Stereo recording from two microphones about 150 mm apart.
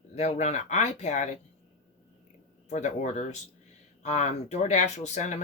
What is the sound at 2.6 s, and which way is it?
Speech, 50° left (ahead or behind).